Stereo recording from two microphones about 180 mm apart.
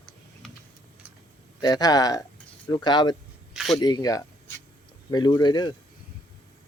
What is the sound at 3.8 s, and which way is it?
Speech, 20° left (ahead or behind).